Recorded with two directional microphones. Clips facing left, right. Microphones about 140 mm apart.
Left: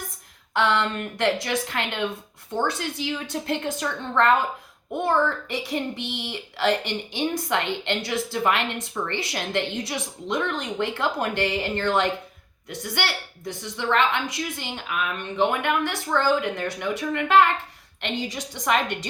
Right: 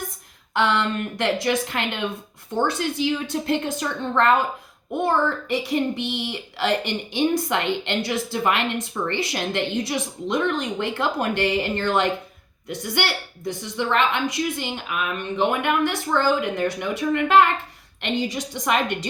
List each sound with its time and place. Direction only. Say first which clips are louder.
0.5 s a woman's voice: right 1 dB; 15° right (ahead or behind)